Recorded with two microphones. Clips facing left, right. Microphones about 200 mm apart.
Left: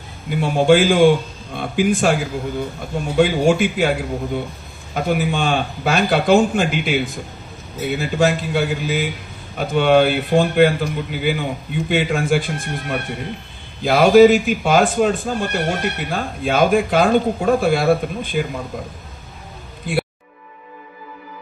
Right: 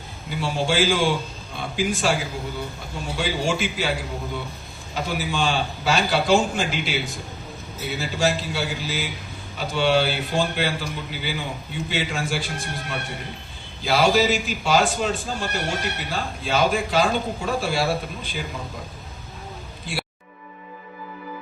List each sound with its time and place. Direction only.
0.3 s a man's voice: 55° left (ahead or behind)
4.9 s a man's voice: 55° left (ahead or behind)